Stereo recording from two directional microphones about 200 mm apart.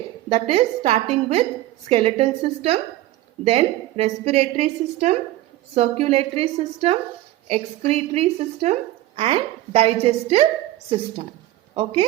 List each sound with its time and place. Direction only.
0.3 s a woman's voice: 30° right (ahead or behind)